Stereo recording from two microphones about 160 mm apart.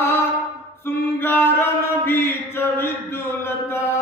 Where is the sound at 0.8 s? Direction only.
15° left (ahead or behind).